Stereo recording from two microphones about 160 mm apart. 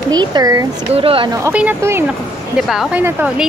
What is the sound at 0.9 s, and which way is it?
Speech, 35° right (ahead or behind).